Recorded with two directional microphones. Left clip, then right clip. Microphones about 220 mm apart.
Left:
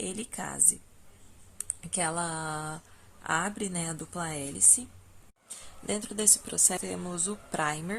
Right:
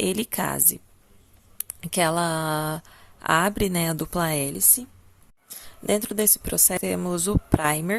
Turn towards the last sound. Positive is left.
turn(degrees=-35)  # may be behind; listen again after turning